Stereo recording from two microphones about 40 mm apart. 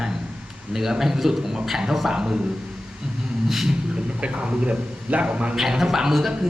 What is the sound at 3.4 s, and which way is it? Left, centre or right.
Speech, centre.